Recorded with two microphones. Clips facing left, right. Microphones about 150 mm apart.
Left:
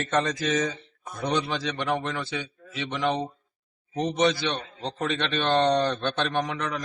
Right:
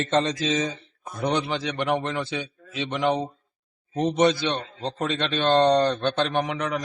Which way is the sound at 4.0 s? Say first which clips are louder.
Right 3 dB; 60° right (ahead or behind).